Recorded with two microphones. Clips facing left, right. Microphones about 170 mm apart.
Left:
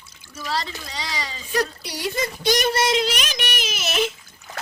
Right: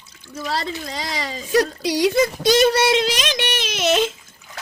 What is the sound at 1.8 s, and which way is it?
Speech, 90° right.